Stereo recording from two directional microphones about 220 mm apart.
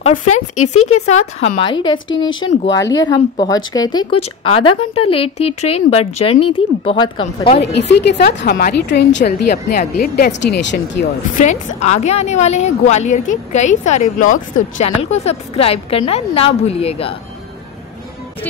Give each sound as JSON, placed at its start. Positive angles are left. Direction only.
{"t": 0.1, "sound": "speech", "side_deg": 90}
{"t": 1.6, "sound": "speech", "side_deg": 20}
{"t": 6.1, "sound": "a woman's voice", "side_deg": 90}
{"t": 6.8, "sound": "speech", "side_deg": 25}
{"t": 7.9, "sound": "speech", "side_deg": 50}
{"t": 11.3, "sound": "a woman's voice", "side_deg": 35}